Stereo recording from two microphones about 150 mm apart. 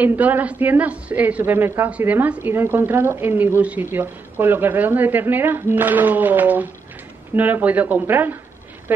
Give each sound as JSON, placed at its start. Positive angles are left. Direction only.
{"t": 0.0, "sound": "a woman's voice", "side_deg": -10}